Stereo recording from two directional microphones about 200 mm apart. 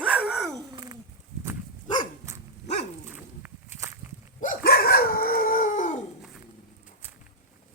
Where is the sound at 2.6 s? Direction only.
35° left (ahead or behind).